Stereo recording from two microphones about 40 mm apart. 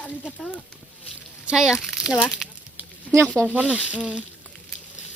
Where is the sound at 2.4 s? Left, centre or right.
Centre.